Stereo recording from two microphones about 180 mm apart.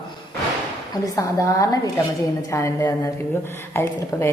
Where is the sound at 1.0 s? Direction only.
20° left (ahead or behind).